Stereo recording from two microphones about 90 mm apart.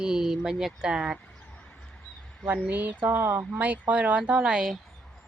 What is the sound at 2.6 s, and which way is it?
Speech, 20° right (ahead or behind).